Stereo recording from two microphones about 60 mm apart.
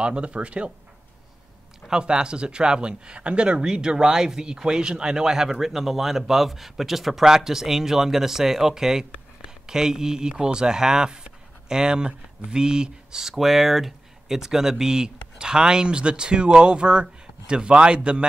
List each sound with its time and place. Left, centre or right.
0.0 s speech: centre
1.9 s speech: centre